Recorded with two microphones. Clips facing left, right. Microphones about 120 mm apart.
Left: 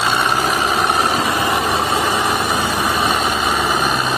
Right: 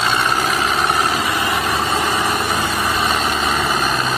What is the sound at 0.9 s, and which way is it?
Vehicle, 25° left (ahead or behind).